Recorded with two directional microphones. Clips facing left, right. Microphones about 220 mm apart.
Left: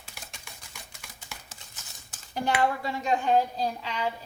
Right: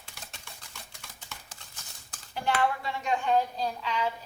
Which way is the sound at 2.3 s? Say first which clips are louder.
Left 2 dB; 40° left (ahead or behind).